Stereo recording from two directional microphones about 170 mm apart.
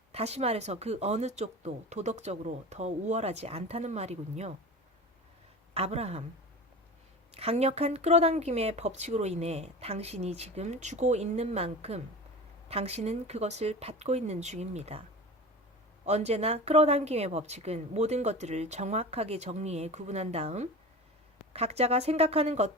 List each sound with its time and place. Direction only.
0.1 s speech: 40° right (ahead or behind)
5.7 s speech: 35° right (ahead or behind)
7.3 s speech: 35° right (ahead or behind)
16.0 s speech: 40° right (ahead or behind)